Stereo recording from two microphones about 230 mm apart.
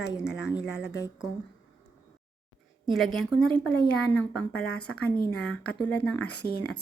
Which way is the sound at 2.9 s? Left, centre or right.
Centre.